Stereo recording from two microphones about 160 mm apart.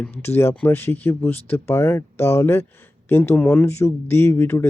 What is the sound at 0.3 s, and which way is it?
Speech, 15° left (ahead or behind).